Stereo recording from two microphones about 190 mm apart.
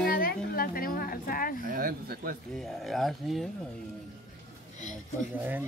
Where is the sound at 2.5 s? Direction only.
Centre (ahead or behind).